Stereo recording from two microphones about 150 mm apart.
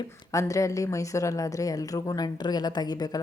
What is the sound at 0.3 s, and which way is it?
A woman's voice, 20° left (ahead or behind).